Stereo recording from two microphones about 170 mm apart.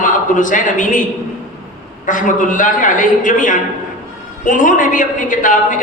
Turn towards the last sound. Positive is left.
turn(degrees=50)  # may be behind; listen again after turning